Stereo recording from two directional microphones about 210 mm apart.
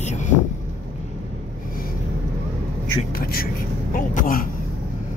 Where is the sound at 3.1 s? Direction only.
45° left (ahead or behind).